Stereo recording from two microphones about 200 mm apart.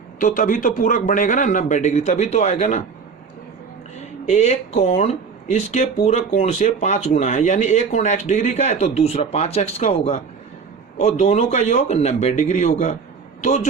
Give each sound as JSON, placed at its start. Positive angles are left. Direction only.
{"t": 0.2, "sound": "speech", "side_deg": 40}
{"t": 4.3, "sound": "a man's voice", "side_deg": 35}